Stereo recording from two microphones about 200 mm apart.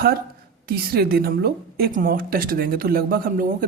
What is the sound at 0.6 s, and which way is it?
Speech, 50° right (ahead or behind).